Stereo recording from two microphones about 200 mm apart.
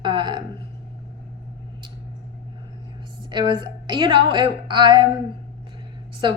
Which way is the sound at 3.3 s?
20° right (ahead or behind).